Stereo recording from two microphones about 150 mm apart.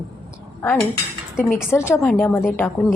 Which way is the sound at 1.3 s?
15° left (ahead or behind).